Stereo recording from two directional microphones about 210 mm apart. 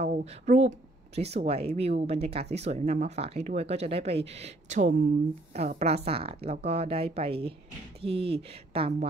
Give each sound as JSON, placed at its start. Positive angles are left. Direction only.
{"t": 0.0, "sound": "speech", "side_deg": -30}